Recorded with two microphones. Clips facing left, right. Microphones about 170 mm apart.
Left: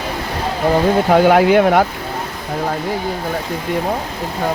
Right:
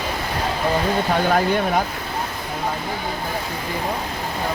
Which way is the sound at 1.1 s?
75° left (ahead or behind).